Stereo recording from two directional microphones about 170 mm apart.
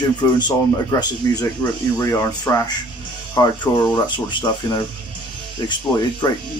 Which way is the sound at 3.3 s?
25° left (ahead or behind).